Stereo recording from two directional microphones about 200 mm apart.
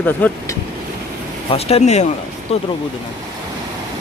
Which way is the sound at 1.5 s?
30° left (ahead or behind).